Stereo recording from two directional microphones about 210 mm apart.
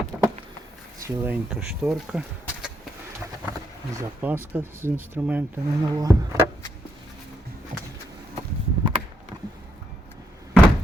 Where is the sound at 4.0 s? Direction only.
10° right (ahead or behind).